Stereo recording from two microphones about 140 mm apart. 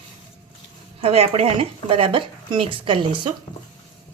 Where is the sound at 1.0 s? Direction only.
45° right (ahead or behind).